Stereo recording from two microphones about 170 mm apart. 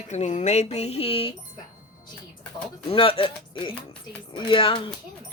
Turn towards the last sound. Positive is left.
turn(degrees=30)  # may be behind; listen again after turning